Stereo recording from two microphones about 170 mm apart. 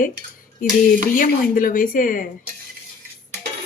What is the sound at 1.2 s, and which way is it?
A woman's voice, 55° left (ahead or behind).